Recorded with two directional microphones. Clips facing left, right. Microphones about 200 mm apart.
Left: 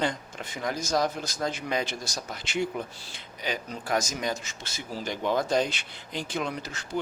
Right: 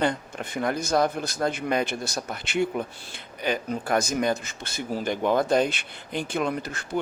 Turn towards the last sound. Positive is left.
turn(degrees=-55)  # may be behind; listen again after turning